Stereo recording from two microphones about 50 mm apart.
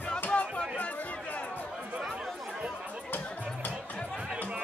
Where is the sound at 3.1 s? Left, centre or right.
Left.